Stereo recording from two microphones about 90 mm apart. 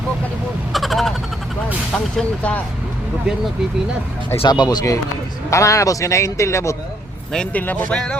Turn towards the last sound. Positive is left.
turn(degrees=10)  # may be behind; listen again after turning